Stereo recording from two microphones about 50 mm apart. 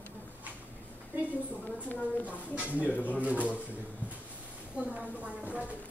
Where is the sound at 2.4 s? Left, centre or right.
Right.